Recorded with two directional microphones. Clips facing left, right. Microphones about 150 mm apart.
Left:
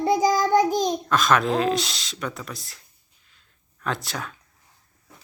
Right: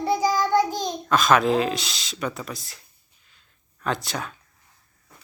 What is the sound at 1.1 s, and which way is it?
Speech, centre (ahead or behind).